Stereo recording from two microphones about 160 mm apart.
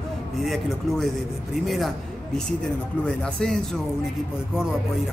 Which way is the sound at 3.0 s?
5° left (ahead or behind).